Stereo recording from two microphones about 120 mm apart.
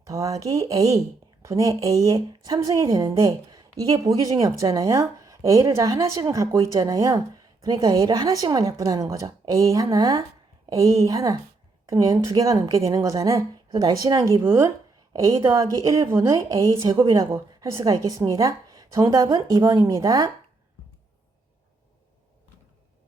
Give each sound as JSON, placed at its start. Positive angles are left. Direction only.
{"t": 0.0, "sound": "a woman's voice", "side_deg": -25}
{"t": 14.4, "sound": "speech", "side_deg": -20}
{"t": 16.7, "sound": "a woman's voice", "side_deg": -45}
{"t": 17.0, "sound": "speech", "side_deg": -30}